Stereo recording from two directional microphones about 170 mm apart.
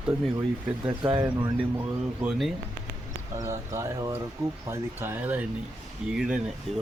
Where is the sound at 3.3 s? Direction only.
15° right (ahead or behind).